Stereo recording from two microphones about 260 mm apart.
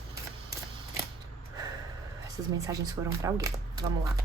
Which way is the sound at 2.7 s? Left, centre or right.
Centre.